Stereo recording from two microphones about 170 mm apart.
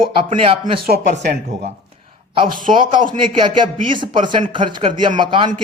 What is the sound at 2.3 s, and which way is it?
Speech, 30° right (ahead or behind).